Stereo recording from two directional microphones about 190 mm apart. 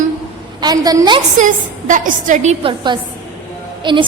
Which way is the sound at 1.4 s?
40° right (ahead or behind).